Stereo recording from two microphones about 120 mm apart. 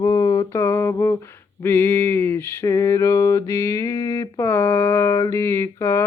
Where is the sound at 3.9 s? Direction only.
45° left (ahead or behind).